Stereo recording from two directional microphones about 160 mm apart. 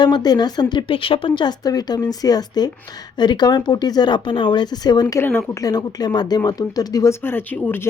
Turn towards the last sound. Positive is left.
turn(degrees=10)  # may be behind; listen again after turning